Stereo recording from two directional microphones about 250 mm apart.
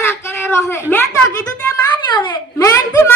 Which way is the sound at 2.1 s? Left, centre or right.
Centre.